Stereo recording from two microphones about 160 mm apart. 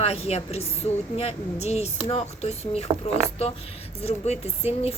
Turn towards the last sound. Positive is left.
turn(degrees=40)  # may be behind; listen again after turning